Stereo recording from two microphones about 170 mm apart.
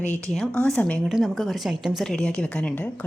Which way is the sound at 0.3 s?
Centre (ahead or behind).